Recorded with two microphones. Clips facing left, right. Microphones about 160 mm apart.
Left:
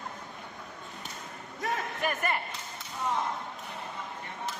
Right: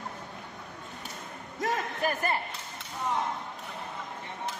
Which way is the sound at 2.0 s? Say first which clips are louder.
Right 1 dB; 35° right (ahead or behind).